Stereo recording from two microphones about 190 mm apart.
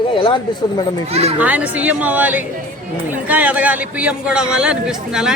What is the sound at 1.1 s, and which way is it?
Speech, 30° right (ahead or behind).